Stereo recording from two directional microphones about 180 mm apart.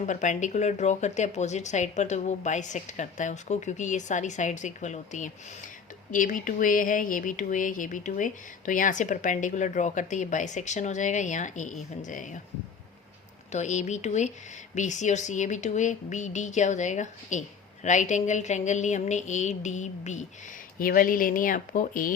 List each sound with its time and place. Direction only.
0.0 s speech: 45° left (ahead or behind)
13.5 s speech: 40° left (ahead or behind)
20.7 s speech: 50° left (ahead or behind)